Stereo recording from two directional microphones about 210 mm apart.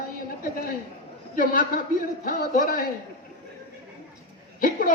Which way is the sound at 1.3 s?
40° left (ahead or behind).